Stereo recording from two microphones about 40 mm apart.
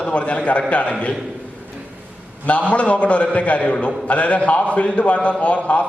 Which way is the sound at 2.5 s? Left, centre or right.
Left.